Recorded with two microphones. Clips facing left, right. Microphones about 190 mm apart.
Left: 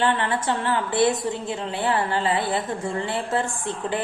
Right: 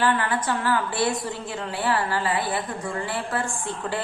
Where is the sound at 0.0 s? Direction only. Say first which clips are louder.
Left 1 dB; 25° left (ahead or behind).